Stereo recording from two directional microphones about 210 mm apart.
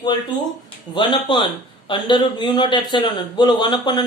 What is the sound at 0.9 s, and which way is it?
A man's voice, 20° left (ahead or behind).